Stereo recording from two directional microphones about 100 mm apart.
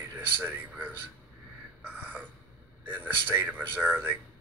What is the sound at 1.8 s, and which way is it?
Gasp, 20° right (ahead or behind).